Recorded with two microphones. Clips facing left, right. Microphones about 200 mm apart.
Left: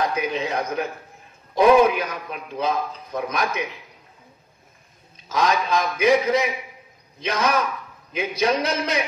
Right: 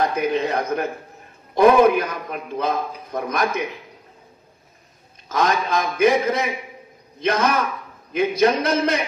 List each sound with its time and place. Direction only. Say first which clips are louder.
0.0 s a man's voice: right 3 dB; 55° right (ahead or behind)
5.3 s a man's voice: right 1 dB; 50° right (ahead or behind)